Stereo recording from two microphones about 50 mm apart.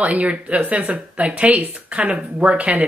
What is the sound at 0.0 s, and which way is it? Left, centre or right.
Speech, right.